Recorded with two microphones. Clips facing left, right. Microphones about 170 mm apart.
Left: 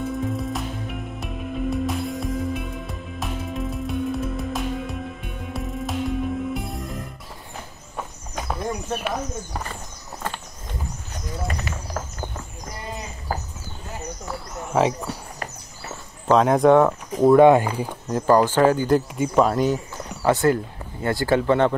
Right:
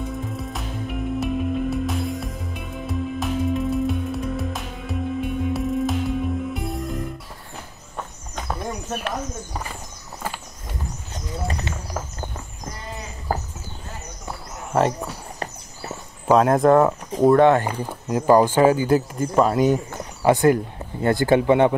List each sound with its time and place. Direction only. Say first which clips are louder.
0.0 s music: left 4 dB; centre (ahead or behind)
7.9 s horse: left 1 dB; 5° left (ahead or behind)
10.2 s horse: even; 10° right (ahead or behind)
14.7 s a sound: even; centre (ahead or behind)
16.3 s speech: even; 5° right (ahead or behind)
17.3 s speech: left 3 dB; 10° left (ahead or behind)
17.8 s speech: right 2 dB; 10° right (ahead or behind)
20.2 s speech: right 2 dB; 15° right (ahead or behind)